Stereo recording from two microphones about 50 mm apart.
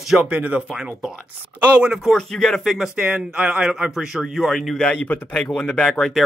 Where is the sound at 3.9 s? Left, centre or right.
Centre.